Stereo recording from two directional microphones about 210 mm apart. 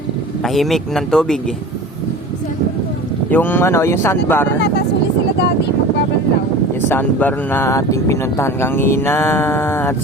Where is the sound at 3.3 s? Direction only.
10° left (ahead or behind).